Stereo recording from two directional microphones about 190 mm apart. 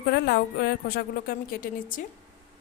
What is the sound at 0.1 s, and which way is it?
A woman's voice, 60° left (ahead or behind).